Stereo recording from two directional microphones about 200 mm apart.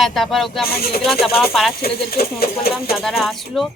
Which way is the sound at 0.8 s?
50° left (ahead or behind).